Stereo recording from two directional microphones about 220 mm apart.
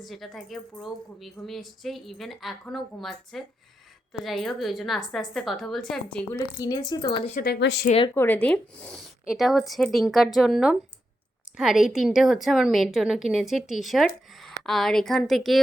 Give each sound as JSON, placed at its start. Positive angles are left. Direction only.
{"t": 0.0, "sound": "a woman's voice", "side_deg": 0}
{"t": 6.3, "sound": "speech", "side_deg": 15}
{"t": 7.3, "sound": "speech", "side_deg": 45}
{"t": 7.9, "sound": "speech", "side_deg": 25}
{"t": 8.1, "sound": "a woman's voice", "side_deg": 10}